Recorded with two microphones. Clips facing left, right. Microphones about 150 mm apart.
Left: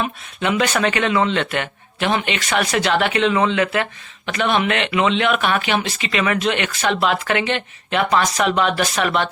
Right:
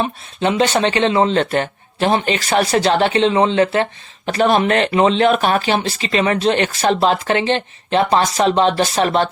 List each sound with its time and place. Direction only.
0.0 s speech: 30° right (ahead or behind)